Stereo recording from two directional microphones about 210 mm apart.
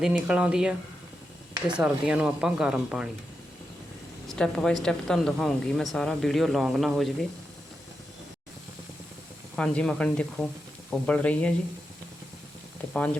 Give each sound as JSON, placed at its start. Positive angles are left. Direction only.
{"t": 0.0, "sound": "speech", "side_deg": -5}
{"t": 4.3, "sound": "speech", "side_deg": 5}
{"t": 9.6, "sound": "speech", "side_deg": 5}